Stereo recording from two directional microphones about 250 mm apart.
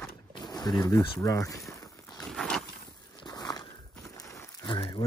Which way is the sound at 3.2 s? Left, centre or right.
Centre.